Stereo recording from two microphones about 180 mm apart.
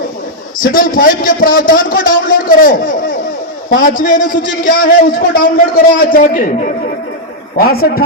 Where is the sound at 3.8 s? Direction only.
50° left (ahead or behind).